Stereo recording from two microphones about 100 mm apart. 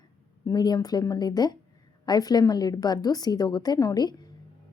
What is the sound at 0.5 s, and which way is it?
A woman's voice, 45° left (ahead or behind).